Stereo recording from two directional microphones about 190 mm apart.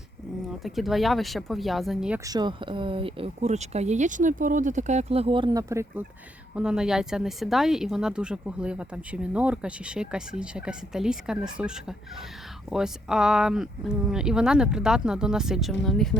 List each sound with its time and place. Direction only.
0.6 s a woman's voice: centre (ahead or behind)
2.2 s speech: 20° right (ahead or behind)
6.6 s a woman's voice: 5° right (ahead or behind)